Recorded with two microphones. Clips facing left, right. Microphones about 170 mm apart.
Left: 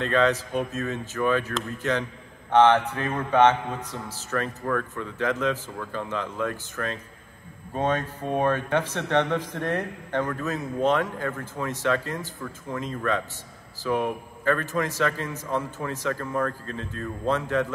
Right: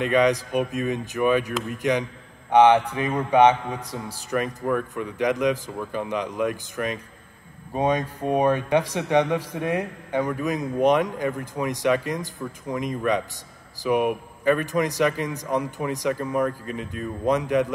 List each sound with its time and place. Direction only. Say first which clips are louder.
0.0 s speech: right 3 dB; 15° right (ahead or behind)